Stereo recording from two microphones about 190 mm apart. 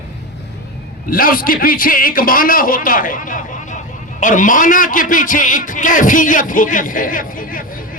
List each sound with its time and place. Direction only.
1.1 s a man's voice: 50° left (ahead or behind)